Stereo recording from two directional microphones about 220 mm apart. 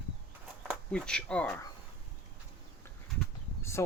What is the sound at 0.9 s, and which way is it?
Speech, 5° left (ahead or behind).